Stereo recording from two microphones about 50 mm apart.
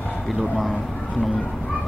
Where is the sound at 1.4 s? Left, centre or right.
Centre.